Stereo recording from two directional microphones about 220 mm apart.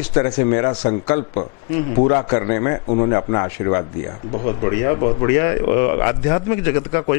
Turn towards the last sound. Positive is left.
turn(degrees=15)  # may be behind; listen again after turning